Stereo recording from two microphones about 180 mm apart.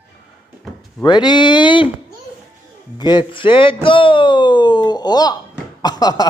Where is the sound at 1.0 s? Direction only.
25° left (ahead or behind).